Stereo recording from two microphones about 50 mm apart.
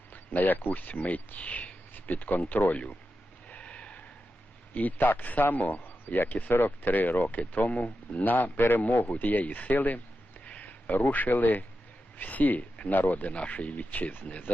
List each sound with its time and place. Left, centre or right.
0.1 s speech: left
3.5 s a sound: left
4.7 s speech: left